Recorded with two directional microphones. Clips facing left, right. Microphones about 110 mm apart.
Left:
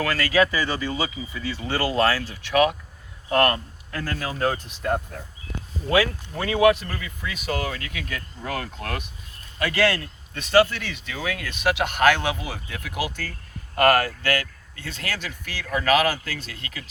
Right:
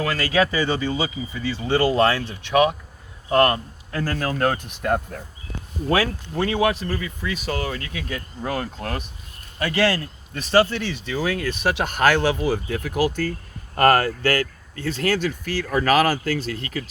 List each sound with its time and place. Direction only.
0.0 s speech: 25° right (ahead or behind)
4.3 s speech: 60° right (ahead or behind)
5.9 s speech: 35° right (ahead or behind)